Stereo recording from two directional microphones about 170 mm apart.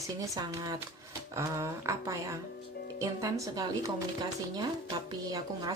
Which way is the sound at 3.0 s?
20° right (ahead or behind).